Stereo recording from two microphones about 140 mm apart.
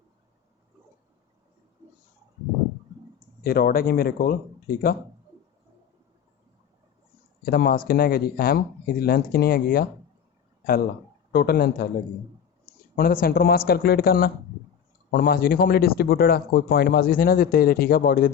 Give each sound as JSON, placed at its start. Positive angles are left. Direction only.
{"t": 3.4, "sound": "speech", "side_deg": 90}
{"t": 7.4, "sound": "speech", "side_deg": 90}
{"t": 11.3, "sound": "speech", "side_deg": 90}
{"t": 13.0, "sound": "speech", "side_deg": 90}